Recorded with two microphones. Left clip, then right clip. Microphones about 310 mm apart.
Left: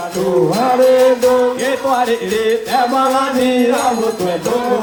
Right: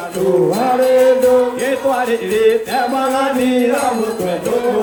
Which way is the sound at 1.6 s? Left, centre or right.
Left.